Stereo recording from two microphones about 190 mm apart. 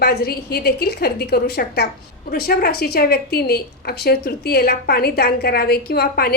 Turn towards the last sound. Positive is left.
turn(degrees=55)  # may be behind; listen again after turning